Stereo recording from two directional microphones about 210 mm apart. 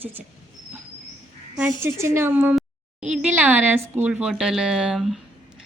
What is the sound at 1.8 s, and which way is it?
A woman's voice, 10° right (ahead or behind).